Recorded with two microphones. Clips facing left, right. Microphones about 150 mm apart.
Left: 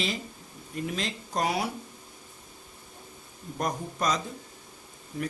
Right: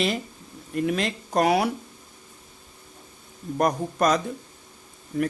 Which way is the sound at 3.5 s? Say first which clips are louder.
Right 8 dB; 60° right (ahead or behind).